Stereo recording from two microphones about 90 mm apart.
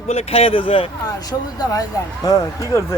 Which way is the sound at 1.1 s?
45° left (ahead or behind).